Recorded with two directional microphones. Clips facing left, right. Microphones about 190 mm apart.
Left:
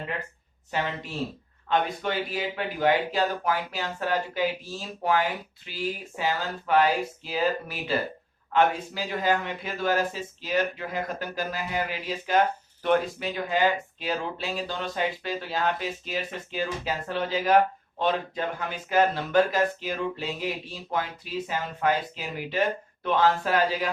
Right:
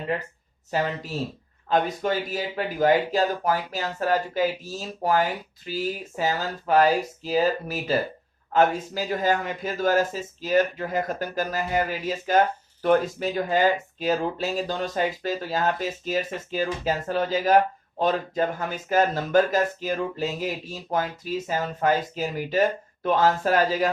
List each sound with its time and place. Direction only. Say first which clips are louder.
0.7 s speech: right 4 dB; 40° right (ahead or behind)